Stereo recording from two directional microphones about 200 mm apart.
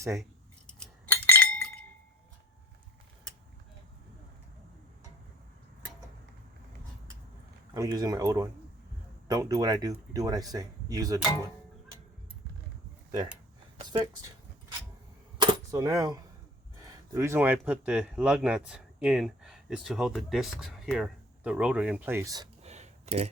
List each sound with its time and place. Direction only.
0.7 s chink: 5° left (ahead or behind)
7.7 s speech: 20° right (ahead or behind)
13.7 s speech: 25° right (ahead or behind)
15.4 s cap gun: 15° right (ahead or behind)
16.8 s speech: 15° right (ahead or behind)
22.6 s a sound: 35° right (ahead or behind)